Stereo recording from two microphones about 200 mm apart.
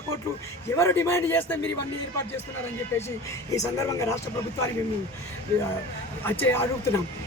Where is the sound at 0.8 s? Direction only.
15° left (ahead or behind).